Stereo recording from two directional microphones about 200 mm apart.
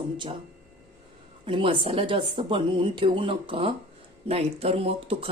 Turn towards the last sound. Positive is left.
turn(degrees=-30)  # may be behind; listen again after turning